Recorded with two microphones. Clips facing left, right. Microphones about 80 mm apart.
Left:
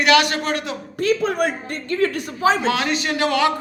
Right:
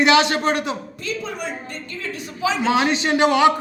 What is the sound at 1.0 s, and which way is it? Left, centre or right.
A woman's voice, left.